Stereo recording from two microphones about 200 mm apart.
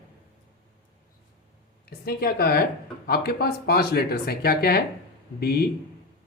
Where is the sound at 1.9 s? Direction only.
50° left (ahead or behind).